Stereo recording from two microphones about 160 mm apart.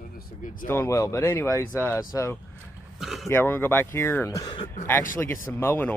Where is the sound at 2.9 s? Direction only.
Centre (ahead or behind).